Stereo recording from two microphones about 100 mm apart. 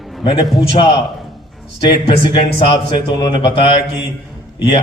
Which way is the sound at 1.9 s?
60° left (ahead or behind).